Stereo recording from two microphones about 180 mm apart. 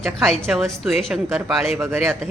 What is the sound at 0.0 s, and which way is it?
Speech, centre (ahead or behind).